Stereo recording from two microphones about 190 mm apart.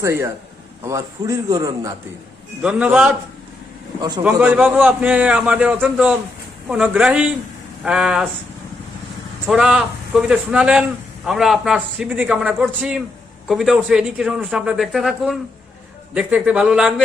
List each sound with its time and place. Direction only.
0.0 s a man's voice: 15° right (ahead or behind)
2.6 s a man's voice: 5° right (ahead or behind)
4.2 s a man's voice: 5° right (ahead or behind)
9.5 s a man's voice: 5° right (ahead or behind)